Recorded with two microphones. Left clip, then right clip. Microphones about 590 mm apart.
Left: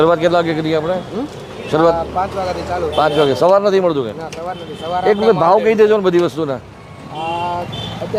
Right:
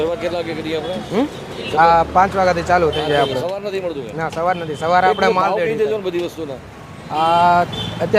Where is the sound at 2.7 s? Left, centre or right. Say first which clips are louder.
Right 7 dB; right.